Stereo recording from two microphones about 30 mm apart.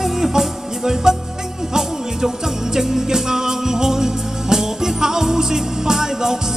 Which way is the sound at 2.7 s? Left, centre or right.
Centre.